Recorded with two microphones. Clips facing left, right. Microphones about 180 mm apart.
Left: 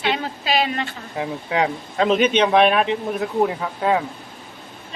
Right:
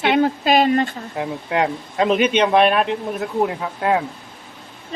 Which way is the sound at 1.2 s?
5° right (ahead or behind).